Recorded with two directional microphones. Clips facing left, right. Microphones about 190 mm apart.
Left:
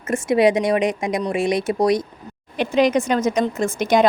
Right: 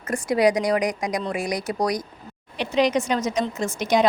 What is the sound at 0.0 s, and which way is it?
Speech, 25° left (ahead or behind).